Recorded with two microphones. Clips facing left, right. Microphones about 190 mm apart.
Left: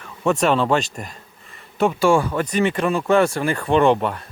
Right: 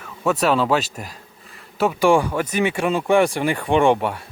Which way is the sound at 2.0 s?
15° right (ahead or behind).